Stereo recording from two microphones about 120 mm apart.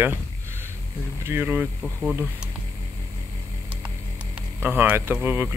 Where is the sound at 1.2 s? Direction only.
20° right (ahead or behind).